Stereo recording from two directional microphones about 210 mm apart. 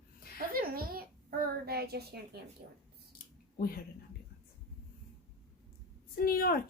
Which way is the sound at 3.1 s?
45° left (ahead or behind).